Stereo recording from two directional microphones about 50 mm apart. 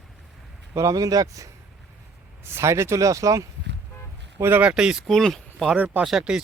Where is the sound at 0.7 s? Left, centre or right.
Right.